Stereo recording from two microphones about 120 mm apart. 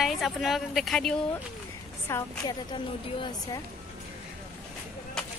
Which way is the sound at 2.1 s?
20° left (ahead or behind).